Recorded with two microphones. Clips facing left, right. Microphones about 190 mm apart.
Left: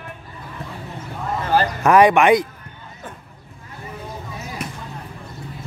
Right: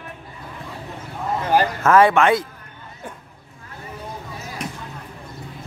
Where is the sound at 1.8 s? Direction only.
15° left (ahead or behind).